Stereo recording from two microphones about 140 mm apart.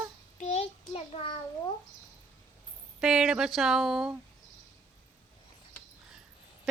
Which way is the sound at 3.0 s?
5° right (ahead or behind).